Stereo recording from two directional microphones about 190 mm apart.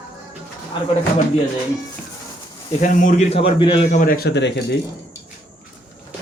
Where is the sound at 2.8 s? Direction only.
40° left (ahead or behind); by 3.9 s 25° left (ahead or behind).